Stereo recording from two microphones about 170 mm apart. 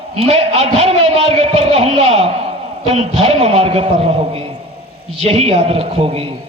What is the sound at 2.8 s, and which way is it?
A man's voice, 35° right (ahead or behind).